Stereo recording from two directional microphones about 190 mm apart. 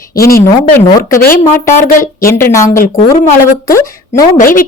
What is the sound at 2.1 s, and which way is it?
A woman's voice, 15° left (ahead or behind).